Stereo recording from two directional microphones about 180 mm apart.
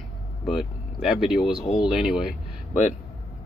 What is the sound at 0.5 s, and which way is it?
Speech, centre (ahead or behind).